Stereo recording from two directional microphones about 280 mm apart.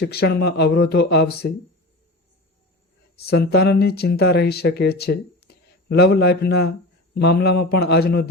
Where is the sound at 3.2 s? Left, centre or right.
Left.